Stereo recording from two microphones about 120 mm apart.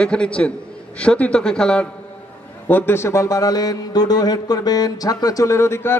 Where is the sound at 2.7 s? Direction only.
20° left (ahead or behind).